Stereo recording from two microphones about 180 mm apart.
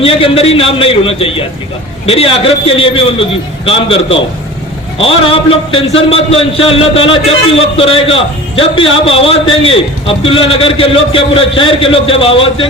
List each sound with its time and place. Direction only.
0.0 s a man's voice: 30° left (ahead or behind)